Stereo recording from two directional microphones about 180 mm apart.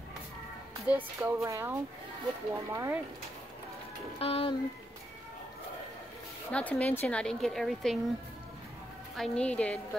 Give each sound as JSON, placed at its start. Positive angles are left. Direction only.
{"t": 0.8, "sound": "a woman's voice", "side_deg": -10}
{"t": 4.2, "sound": "speech", "side_deg": 30}
{"t": 6.5, "sound": "a woman's voice", "side_deg": 5}
{"t": 9.1, "sound": "a woman's voice", "side_deg": 5}